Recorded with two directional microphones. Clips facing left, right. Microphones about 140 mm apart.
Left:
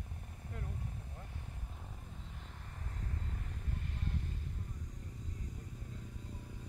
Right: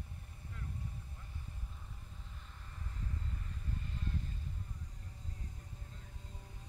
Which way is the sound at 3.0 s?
70° left (ahead or behind).